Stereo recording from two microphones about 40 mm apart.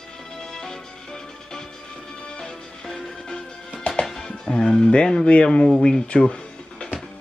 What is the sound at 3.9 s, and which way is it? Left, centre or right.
Speech, centre.